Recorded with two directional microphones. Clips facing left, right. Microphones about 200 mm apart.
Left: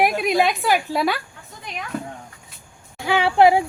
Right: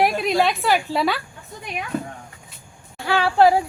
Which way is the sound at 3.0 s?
15° left (ahead or behind).